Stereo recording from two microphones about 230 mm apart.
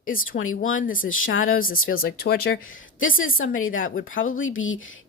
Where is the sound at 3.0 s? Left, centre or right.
Left.